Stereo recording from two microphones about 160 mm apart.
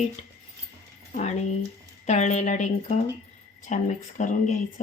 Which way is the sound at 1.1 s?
45° left (ahead or behind).